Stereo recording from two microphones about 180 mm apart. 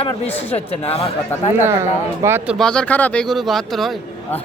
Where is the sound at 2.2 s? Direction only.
15° right (ahead or behind).